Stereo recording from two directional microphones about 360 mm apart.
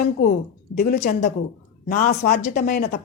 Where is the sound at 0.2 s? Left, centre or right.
Left.